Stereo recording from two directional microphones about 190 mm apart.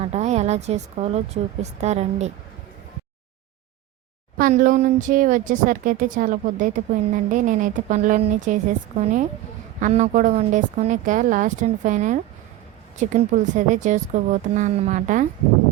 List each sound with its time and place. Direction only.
0.0 s speech: 35° right (ahead or behind)
4.4 s speech: 45° right (ahead or behind)
9.8 s speech: 40° right (ahead or behind)